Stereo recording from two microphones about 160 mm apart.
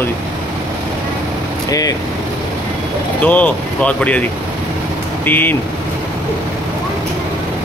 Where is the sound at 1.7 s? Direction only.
20° left (ahead or behind).